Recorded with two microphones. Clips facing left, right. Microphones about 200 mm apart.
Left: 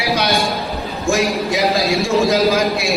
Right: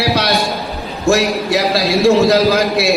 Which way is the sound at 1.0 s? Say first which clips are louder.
Right 4 dB; 70° right (ahead or behind).